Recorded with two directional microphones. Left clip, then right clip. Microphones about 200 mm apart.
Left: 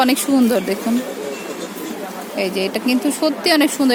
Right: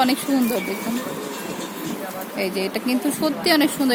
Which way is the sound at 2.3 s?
5° left (ahead or behind).